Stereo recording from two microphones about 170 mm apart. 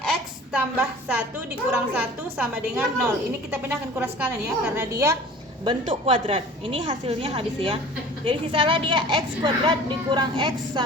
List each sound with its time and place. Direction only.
0.5 s a woman's voice: 10° right (ahead or behind)
5.6 s a woman's voice: 30° right (ahead or behind)